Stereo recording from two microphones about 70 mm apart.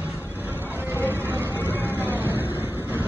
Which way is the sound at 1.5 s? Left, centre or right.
Left.